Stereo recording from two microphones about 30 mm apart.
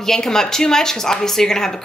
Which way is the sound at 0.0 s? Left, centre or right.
Centre.